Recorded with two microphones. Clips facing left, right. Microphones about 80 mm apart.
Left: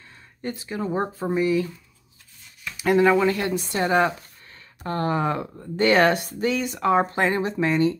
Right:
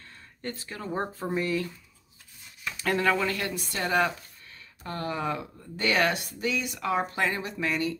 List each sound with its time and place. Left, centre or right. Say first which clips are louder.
0.4 s speech: left 8 dB; centre
2.8 s speech: left 8 dB; centre
4.8 s speech: left 7 dB; left